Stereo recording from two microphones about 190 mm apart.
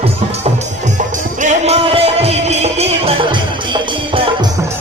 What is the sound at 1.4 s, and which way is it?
Music, 35° right (ahead or behind).